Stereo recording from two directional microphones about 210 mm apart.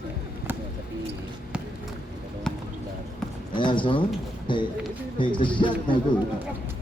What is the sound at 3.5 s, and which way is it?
Speech, 25° left (ahead or behind).